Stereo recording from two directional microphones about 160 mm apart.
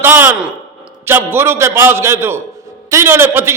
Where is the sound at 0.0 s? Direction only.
15° right (ahead or behind).